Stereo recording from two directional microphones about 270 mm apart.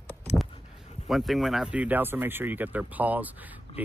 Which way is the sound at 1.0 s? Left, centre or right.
Centre.